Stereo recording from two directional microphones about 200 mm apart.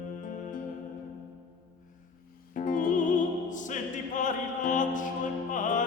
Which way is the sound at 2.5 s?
40° left (ahead or behind).